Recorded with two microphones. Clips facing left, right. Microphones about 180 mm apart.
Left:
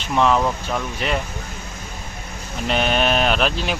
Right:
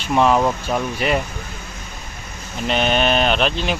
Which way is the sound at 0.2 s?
15° right (ahead or behind).